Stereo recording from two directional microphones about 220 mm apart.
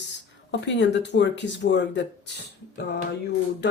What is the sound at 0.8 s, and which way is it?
Speech, 55° left (ahead or behind).